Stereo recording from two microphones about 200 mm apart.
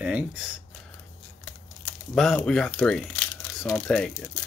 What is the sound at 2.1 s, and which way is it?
Speech, centre (ahead or behind).